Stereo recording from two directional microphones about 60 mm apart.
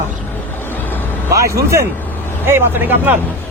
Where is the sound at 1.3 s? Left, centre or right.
Right.